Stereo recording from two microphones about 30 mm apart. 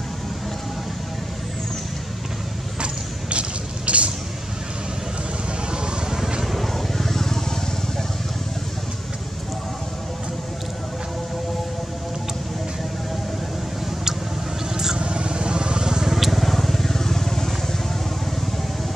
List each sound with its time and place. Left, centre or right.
2.8 s vehicle: right
5.7 s vehicle: right
6.4 s vehicle: centre
15.0 s vehicle: right
16.1 s vehicle: centre